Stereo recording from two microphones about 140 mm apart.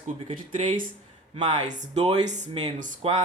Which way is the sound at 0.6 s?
65° right (ahead or behind).